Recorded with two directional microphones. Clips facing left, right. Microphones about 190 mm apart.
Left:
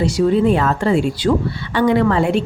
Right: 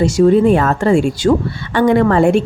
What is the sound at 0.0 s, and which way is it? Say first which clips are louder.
Speech: right 4 dB; 50° right (ahead or behind).